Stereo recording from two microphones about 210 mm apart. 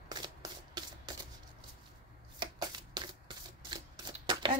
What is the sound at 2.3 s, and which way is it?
Shuffling cards, 20° right (ahead or behind).